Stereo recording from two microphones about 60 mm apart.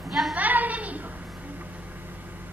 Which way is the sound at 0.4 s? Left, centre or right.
Right.